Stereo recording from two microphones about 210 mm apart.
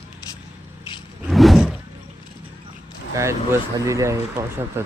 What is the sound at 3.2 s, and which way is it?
Speech, 15° right (ahead or behind).